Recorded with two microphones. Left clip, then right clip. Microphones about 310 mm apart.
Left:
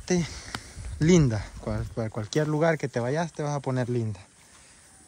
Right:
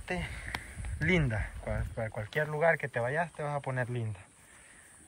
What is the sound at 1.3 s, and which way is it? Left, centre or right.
Speech, left.